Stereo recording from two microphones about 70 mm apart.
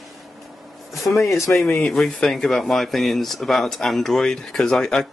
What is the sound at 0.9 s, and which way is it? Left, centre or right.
Speech, centre.